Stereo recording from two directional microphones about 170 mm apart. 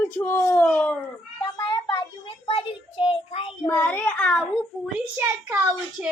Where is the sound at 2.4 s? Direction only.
35° left (ahead or behind).